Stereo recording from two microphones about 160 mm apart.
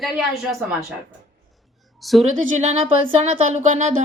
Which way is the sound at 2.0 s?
Centre (ahead or behind).